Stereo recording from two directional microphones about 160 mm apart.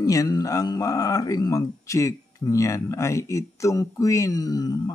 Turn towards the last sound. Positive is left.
turn(degrees=25)  # may be behind; listen again after turning